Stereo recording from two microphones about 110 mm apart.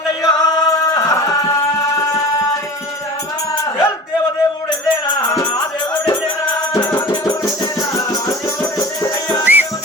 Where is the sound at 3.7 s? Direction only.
25° left (ahead or behind).